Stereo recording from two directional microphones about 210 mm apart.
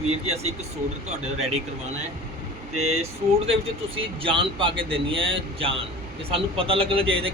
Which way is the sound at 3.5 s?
25° right (ahead or behind).